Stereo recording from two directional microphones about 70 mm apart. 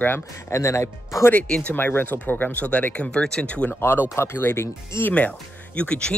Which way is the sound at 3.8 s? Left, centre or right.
Left.